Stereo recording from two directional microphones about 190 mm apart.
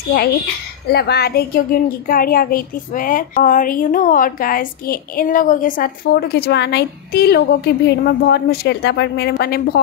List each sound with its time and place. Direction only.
0.9 s a woman's voice: 55° left (ahead or behind)